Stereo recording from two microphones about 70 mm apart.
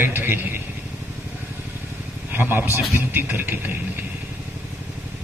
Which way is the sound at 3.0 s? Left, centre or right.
Right.